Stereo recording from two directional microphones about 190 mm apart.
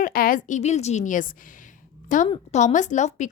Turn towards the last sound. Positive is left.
turn(degrees=40)  # may be behind; listen again after turning